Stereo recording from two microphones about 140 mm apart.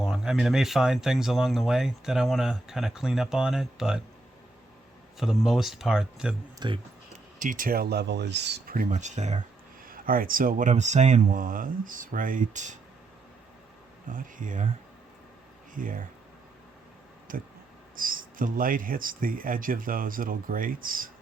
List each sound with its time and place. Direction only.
0.0 s speech: centre (ahead or behind)
5.1 s speech: centre (ahead or behind)
6.6 s speech: 30° right (ahead or behind)
7.3 s speech: 70° right (ahead or behind); by 9.4 s 55° right (ahead or behind)
9.8 s speech: 90° right; by 12.8 s 60° right (ahead or behind)
14.1 s speech: 70° right (ahead or behind)
15.7 s speech: 75° right (ahead or behind)
17.3 s speech: 75° right (ahead or behind)